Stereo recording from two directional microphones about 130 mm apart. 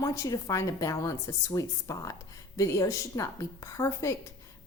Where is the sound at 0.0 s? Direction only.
25° left (ahead or behind).